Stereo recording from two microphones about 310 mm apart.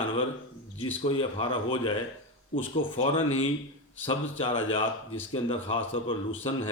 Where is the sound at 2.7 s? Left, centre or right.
Centre.